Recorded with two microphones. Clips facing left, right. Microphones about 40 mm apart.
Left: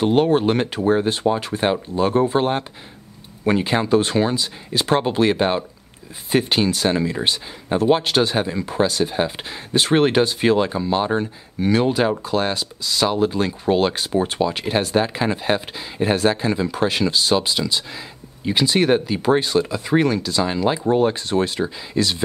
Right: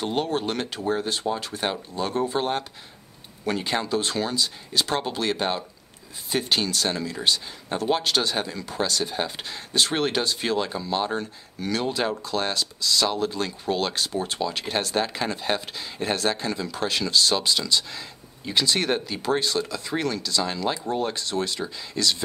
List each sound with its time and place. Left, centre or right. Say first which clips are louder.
0.0 s speech: left 9 dB; left